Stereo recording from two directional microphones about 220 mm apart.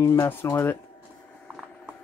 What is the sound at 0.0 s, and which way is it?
Speech, 10° left (ahead or behind).